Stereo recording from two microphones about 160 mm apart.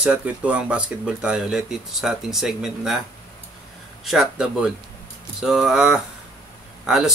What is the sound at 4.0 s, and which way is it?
Speech, centre (ahead or behind).